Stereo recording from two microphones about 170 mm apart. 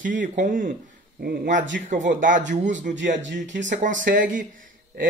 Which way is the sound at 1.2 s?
65° right (ahead or behind).